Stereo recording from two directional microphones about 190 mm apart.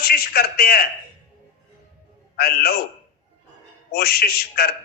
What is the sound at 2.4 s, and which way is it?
Speech, 55° left (ahead or behind).